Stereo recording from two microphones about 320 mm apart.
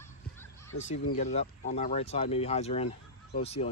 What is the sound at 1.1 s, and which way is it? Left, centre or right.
Speech, centre.